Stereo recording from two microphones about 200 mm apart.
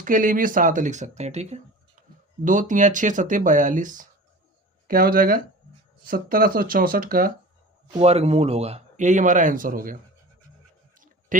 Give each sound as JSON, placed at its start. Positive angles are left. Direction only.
{"t": 0.0, "sound": "speech", "side_deg": -40}
{"t": 2.0, "sound": "a sound", "side_deg": -45}
{"t": 2.4, "sound": "speech", "side_deg": -40}
{"t": 7.9, "sound": "speech", "side_deg": -30}
{"t": 11.3, "sound": "speech", "side_deg": -40}